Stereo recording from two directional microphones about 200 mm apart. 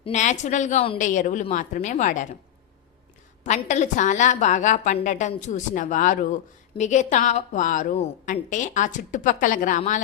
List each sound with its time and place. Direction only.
0.0 s a woman's voice: 35° left (ahead or behind)
3.4 s a woman's voice: 35° left (ahead or behind)